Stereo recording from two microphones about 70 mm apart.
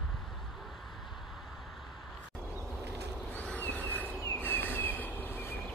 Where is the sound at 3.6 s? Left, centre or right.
Left.